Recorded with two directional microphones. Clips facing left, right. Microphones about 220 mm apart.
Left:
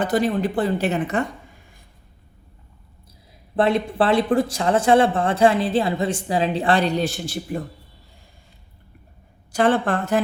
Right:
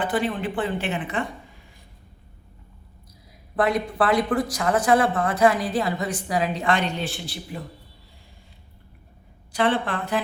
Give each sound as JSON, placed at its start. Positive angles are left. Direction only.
{"t": 0.0, "sound": "speech", "side_deg": 40}
{"t": 3.5, "sound": "speech", "side_deg": 25}
{"t": 9.5, "sound": "a woman's voice", "side_deg": 45}